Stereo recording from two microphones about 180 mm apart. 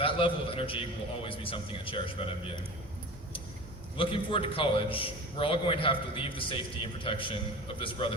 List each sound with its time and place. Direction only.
0.0 s a man's voice: 30° left (ahead or behind)
3.9 s a man's voice: 30° left (ahead or behind)